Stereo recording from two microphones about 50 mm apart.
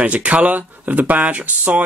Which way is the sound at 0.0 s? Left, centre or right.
Right.